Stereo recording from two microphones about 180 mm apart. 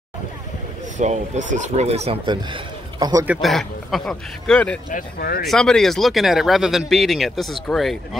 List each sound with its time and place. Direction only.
0.9 s speech: 40° right (ahead or behind); by 3.3 s 20° right (ahead or behind)
3.3 s speech: centre (ahead or behind)
4.9 s speech: 60° left (ahead or behind)
5.5 s speech: 5° left (ahead or behind)